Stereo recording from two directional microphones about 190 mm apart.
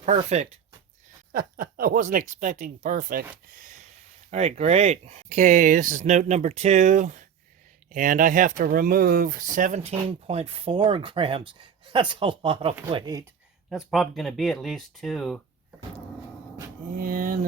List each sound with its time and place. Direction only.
0.0 s speech: 40° right (ahead or behind)
1.3 s speech: 45° right (ahead or behind)
3.5 s a sound: 45° right (ahead or behind)
4.3 s speech: 35° right (ahead or behind)
13.7 s speech: centre (ahead or behind)
16.9 s speech: 45° right (ahead or behind)